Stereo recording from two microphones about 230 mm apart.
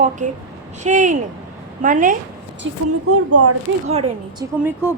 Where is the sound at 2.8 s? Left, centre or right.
Right.